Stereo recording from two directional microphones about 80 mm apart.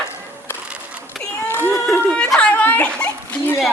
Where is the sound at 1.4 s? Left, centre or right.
Left.